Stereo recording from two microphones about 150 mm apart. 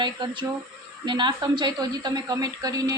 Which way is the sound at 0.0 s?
30° right (ahead or behind).